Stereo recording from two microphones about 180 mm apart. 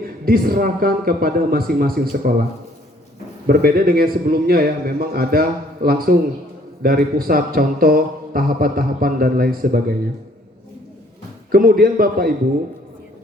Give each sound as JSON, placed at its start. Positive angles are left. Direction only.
{"t": 0.0, "sound": "a man's voice", "side_deg": -55}
{"t": 3.4, "sound": "a man's voice", "side_deg": -55}
{"t": 11.5, "sound": "a man's voice", "side_deg": -55}